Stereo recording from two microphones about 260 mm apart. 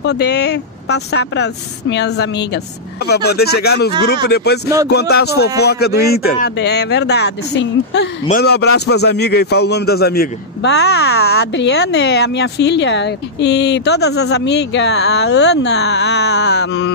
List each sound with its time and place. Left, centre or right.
0.0 s a man's voice: left